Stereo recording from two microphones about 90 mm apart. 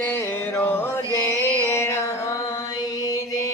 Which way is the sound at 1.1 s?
30° left (ahead or behind).